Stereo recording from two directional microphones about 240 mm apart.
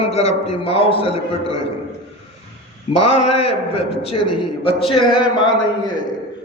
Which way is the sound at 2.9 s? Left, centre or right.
Left.